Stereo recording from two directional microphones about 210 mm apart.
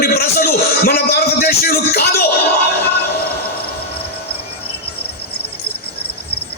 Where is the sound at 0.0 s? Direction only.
45° left (ahead or behind).